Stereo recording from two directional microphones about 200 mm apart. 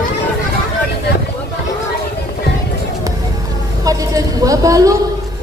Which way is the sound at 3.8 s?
15° right (ahead or behind).